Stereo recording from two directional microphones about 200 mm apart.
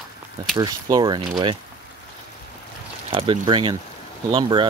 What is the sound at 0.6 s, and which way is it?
Speech, 20° right (ahead or behind).